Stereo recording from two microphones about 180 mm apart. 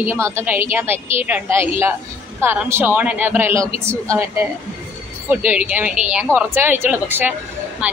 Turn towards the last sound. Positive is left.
turn(degrees=-5)  # may be behind; listen again after turning